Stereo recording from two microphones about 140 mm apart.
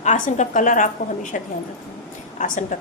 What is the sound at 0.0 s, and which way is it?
A woman's voice, 60° left (ahead or behind).